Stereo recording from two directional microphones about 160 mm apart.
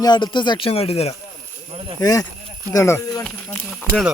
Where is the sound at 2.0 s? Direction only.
20° left (ahead or behind).